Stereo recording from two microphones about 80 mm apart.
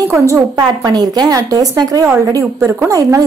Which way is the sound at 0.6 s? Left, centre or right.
Right.